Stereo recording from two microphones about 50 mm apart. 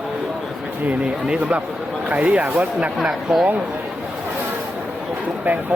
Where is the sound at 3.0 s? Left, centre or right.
Centre.